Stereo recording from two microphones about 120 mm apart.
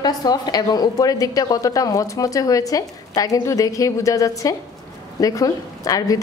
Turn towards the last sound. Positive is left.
turn(degrees=30)  # may be behind; listen again after turning